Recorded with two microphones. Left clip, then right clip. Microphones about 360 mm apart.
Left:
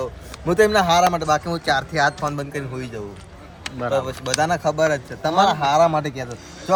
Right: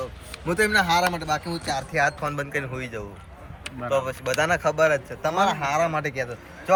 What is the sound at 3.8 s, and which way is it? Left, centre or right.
Speech, centre.